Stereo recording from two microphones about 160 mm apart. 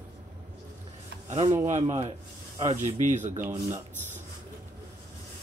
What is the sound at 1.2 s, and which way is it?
Speech, 45° right (ahead or behind).